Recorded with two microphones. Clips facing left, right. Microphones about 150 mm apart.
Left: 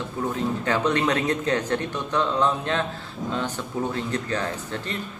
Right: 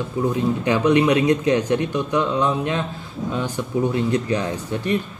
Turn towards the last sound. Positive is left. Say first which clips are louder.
# right 7 dB
turn(degrees=-15)  # may be behind; listen again after turning